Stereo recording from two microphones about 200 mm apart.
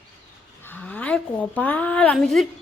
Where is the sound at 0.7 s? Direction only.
5° left (ahead or behind).